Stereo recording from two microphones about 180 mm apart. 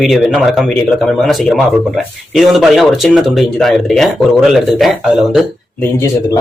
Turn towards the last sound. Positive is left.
turn(degrees=15)  # may be behind; listen again after turning